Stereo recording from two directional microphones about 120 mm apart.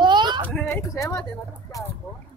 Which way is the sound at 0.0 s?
40° right (ahead or behind).